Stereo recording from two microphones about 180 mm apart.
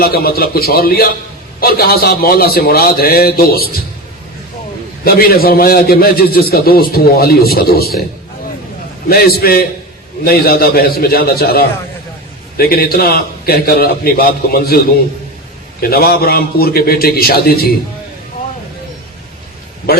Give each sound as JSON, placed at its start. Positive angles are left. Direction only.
{"t": 0.0, "sound": "a man's voice", "side_deg": 55}
{"t": 5.0, "sound": "a man's voice", "side_deg": 55}
{"t": 9.0, "sound": "a man's voice", "side_deg": 60}
{"t": 15.8, "sound": "a man's voice", "side_deg": 55}